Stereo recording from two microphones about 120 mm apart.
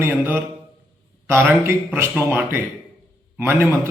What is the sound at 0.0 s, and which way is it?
A man's voice, 20° right (ahead or behind).